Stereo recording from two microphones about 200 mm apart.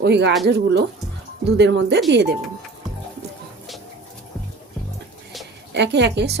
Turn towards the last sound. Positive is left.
turn(degrees=-55)  # may be behind; listen again after turning